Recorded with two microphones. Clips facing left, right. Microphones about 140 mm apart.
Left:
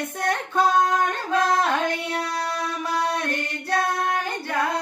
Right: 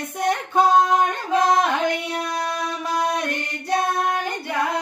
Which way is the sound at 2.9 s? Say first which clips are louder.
Right 2 dB; 15° right (ahead or behind).